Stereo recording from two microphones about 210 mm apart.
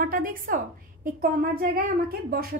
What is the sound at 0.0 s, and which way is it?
A woman's voice, 45° right (ahead or behind).